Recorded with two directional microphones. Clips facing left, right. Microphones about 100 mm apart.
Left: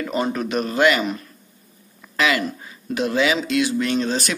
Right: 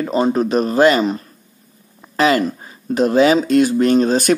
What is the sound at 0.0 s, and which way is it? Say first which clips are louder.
Speech: right 7 dB; 30° right (ahead or behind).